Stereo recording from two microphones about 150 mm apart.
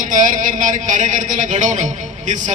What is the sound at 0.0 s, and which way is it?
Speech, 60° right (ahead or behind).